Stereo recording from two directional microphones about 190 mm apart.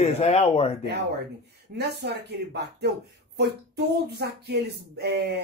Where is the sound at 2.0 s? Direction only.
60° right (ahead or behind).